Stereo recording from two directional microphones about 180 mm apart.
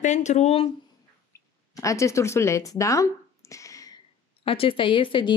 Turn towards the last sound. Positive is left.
turn(degrees=25)  # may be behind; listen again after turning